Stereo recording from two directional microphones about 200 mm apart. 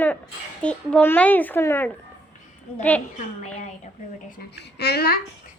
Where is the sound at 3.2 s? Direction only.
35° left (ahead or behind).